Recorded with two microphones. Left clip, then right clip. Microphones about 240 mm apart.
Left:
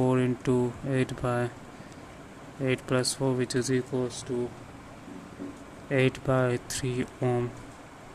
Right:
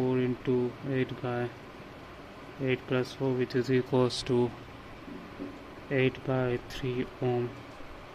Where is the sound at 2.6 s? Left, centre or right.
Centre.